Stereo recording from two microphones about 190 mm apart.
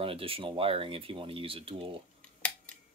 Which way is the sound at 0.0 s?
30° right (ahead or behind).